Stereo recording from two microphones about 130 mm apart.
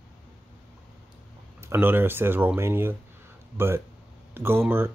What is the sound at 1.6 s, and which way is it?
Speech, 20° right (ahead or behind).